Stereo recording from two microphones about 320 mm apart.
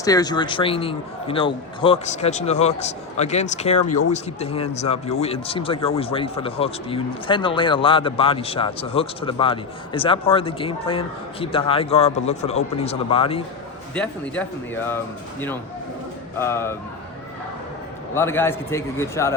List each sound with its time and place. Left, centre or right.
0.0 s a man's voice: centre
13.9 s speech: centre
16.4 s a man's voice: centre
18.1 s a man's voice: centre